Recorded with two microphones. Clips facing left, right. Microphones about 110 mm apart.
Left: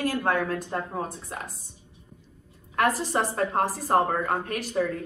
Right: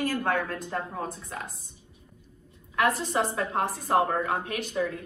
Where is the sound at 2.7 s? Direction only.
40° left (ahead or behind).